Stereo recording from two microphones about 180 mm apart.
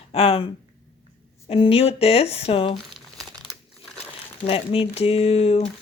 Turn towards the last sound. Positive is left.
turn(degrees=35)  # may be behind; listen again after turning